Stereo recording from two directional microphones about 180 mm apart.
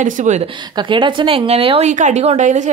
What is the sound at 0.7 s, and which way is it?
A woman's voice, 25° right (ahead or behind).